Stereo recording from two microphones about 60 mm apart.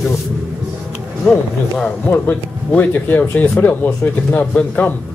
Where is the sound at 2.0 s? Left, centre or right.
Left.